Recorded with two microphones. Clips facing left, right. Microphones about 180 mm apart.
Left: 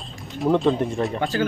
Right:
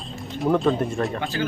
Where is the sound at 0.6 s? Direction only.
15° left (ahead or behind).